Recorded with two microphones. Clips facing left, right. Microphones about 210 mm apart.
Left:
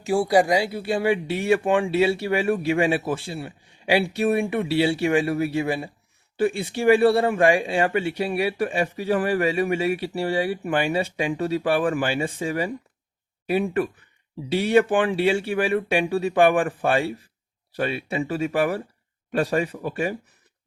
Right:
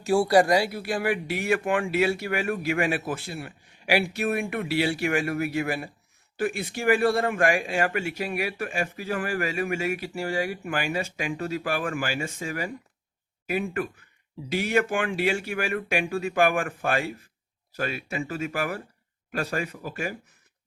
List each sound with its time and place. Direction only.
0.0 s speech: 15° left (ahead or behind); by 20.1 s 35° left (ahead or behind)